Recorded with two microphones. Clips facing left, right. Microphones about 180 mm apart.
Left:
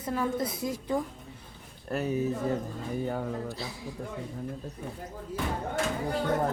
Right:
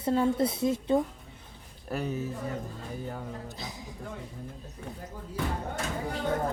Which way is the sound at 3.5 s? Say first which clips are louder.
Left 3 dB; 20° right (ahead or behind).